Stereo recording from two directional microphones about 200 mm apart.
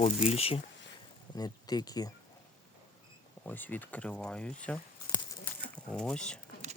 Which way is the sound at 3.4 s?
10° left (ahead or behind).